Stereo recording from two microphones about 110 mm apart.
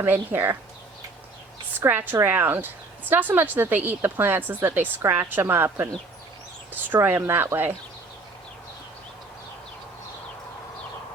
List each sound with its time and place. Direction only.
0.0 s speech: 20° right (ahead or behind)
1.8 s speech: 20° right (ahead or behind)
6.9 s speech: 20° right (ahead or behind)